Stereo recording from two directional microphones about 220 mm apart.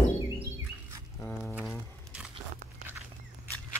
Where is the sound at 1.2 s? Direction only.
5° left (ahead or behind).